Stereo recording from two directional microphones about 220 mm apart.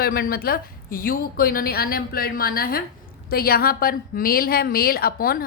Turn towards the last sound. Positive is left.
turn(degrees=40)  # may be behind; listen again after turning